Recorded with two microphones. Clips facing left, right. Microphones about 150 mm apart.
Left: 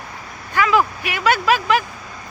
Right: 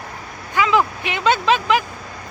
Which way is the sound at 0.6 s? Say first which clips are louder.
Even; 20° right (ahead or behind).